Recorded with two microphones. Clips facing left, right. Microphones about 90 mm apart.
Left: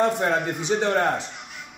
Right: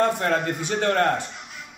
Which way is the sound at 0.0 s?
15° left (ahead or behind).